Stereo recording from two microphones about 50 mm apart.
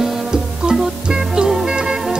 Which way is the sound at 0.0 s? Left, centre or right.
Centre.